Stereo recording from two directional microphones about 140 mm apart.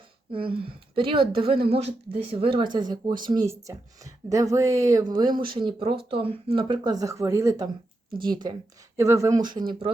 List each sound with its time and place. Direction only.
0.3 s speech: 40° right (ahead or behind)
9.0 s speech: 20° right (ahead or behind)